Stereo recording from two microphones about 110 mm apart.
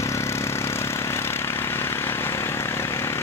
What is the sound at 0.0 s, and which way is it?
Vehicle, 25° left (ahead or behind).